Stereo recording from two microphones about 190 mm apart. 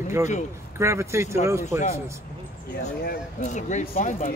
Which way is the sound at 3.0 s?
40° left (ahead or behind).